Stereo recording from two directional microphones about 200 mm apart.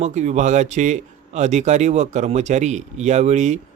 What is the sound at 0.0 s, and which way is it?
Speech, 35° right (ahead or behind).